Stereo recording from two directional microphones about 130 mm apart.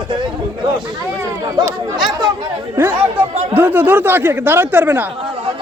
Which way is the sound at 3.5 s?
15° right (ahead or behind).